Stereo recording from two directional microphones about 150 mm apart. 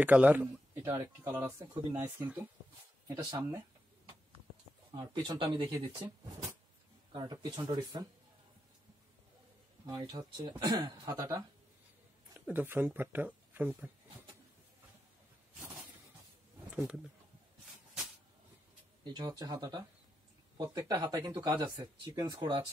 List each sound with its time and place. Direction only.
0.0 s a man's voice: 10° right (ahead or behind)
4.9 s speech: 30° right (ahead or behind)
7.1 s speech: 30° right (ahead or behind)
9.8 s speech: 25° right (ahead or behind)
12.4 s speech: 10° right (ahead or behind)
16.7 s speech: centre (ahead or behind)
19.0 s speech: 30° right (ahead or behind)